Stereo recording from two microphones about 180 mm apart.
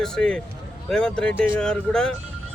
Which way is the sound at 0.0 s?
5° left (ahead or behind).